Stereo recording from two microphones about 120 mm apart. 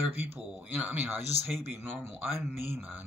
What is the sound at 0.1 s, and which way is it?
Speech, 15° right (ahead or behind).